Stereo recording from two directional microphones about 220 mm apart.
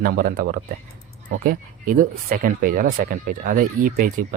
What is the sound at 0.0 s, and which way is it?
Speech, 40° right (ahead or behind).